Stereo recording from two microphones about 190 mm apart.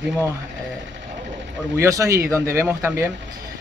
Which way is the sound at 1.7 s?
15° right (ahead or behind).